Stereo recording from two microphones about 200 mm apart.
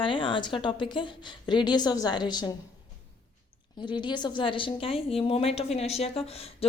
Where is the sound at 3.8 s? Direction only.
25° left (ahead or behind).